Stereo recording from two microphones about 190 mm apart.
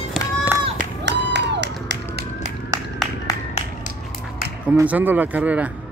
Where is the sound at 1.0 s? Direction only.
65° right (ahead or behind).